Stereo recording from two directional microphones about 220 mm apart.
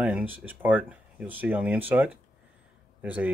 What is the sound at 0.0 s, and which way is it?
Speech, 5° right (ahead or behind).